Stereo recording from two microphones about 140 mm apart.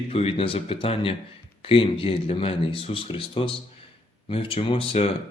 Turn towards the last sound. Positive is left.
turn(degrees=40)  # may be behind; listen again after turning